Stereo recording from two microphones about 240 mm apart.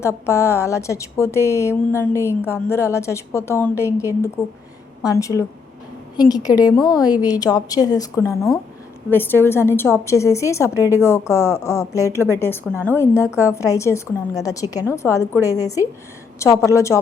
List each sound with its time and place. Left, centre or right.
0.0 s a woman's voice: centre
9.0 s a woman's voice: centre